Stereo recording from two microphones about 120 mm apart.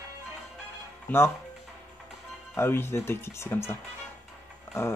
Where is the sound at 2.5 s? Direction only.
20° left (ahead or behind).